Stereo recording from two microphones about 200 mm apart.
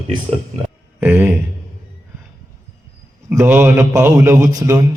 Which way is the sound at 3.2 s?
10° right (ahead or behind).